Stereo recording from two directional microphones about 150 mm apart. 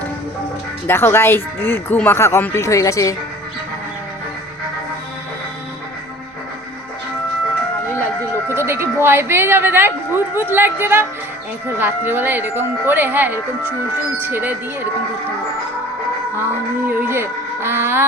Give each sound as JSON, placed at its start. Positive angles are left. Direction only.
{"t": 0.9, "sound": "speech", "side_deg": 15}
{"t": 8.4, "sound": "a woman's voice", "side_deg": -15}
{"t": 16.8, "sound": "a woman's voice", "side_deg": -15}